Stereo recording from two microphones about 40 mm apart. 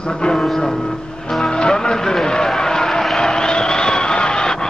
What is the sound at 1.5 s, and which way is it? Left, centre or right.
Music, centre.